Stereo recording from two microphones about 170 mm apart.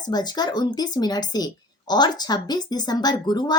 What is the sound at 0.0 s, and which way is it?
Speech, 25° left (ahead or behind).